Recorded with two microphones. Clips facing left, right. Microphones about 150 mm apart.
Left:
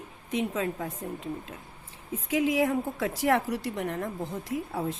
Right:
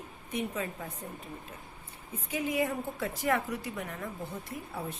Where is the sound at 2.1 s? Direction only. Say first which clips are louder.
Left 7 dB; 90° left; by 3.9 s 75° left (ahead or behind).